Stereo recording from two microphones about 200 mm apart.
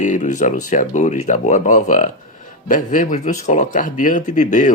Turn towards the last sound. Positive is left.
turn(degrees=40)  # may be behind; listen again after turning